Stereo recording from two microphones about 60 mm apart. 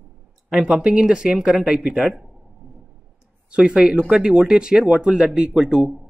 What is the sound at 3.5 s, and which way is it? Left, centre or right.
A man's voice, centre.